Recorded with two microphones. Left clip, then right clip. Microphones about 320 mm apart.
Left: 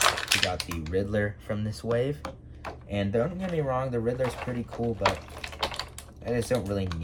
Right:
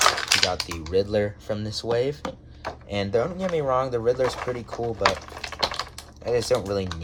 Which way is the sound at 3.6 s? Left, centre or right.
Right.